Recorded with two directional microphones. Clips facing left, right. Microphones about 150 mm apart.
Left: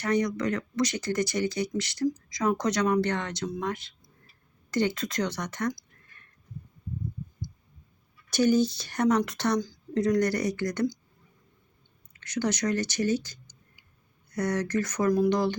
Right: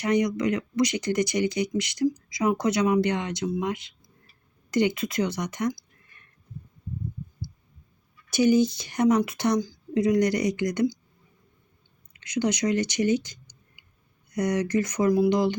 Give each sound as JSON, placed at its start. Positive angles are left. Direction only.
{"t": 0.0, "sound": "speech", "side_deg": -15}
{"t": 8.3, "sound": "speech", "side_deg": -10}
{"t": 12.2, "sound": "speech", "side_deg": -15}